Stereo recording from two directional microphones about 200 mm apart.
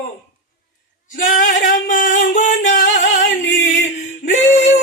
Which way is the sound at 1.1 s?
40° left (ahead or behind).